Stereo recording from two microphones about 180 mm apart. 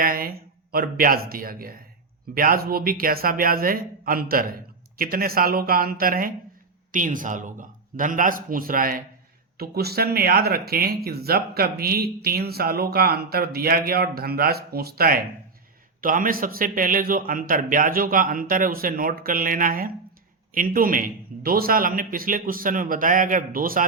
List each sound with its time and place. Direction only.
0.0 s a man's voice: 55° right (ahead or behind)